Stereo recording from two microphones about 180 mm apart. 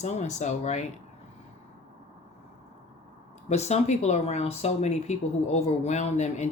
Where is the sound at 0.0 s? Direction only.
40° left (ahead or behind).